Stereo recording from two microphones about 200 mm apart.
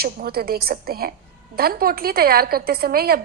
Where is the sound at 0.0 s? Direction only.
50° right (ahead or behind).